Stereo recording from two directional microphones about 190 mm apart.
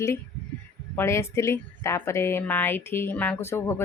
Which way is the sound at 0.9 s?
15° left (ahead or behind).